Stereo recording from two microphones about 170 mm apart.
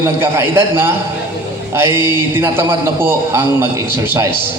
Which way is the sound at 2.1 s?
15° right (ahead or behind).